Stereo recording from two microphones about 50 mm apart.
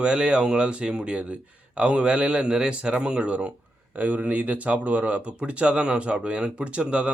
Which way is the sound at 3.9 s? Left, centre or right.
Right.